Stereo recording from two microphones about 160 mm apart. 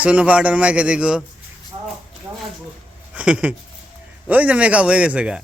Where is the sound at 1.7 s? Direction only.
35° right (ahead or behind).